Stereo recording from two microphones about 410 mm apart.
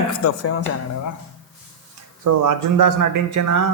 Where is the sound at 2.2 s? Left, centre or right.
Right.